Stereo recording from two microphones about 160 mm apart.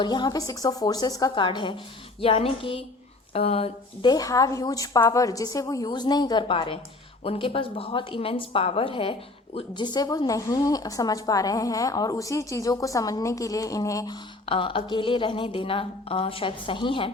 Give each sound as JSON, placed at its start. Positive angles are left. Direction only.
{"t": 0.0, "sound": "a woman's voice", "side_deg": 25}
{"t": 14.4, "sound": "speech", "side_deg": 35}